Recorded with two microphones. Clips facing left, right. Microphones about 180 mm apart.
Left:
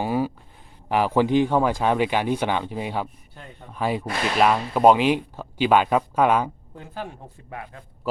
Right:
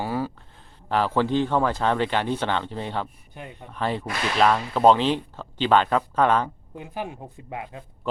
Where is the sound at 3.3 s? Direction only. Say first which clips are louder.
Right 5 dB; 15° right (ahead or behind).